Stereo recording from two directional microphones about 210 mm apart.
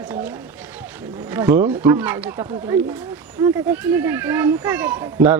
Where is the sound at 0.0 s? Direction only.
10° right (ahead or behind).